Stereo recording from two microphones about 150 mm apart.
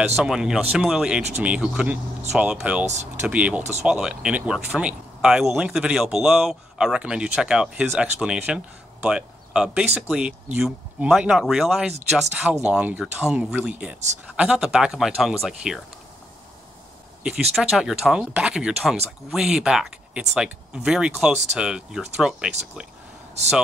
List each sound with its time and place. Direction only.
0.1 s speech: 5° right (ahead or behind)
17.2 s speech: 5° right (ahead or behind)